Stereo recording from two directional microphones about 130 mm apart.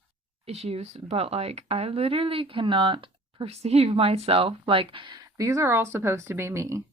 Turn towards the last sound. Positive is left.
turn(degrees=-20)  # may be behind; listen again after turning